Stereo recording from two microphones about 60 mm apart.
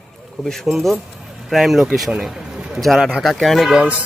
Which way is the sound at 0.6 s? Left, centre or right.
Centre.